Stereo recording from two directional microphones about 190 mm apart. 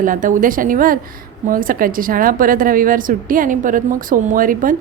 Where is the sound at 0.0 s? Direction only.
45° right (ahead or behind).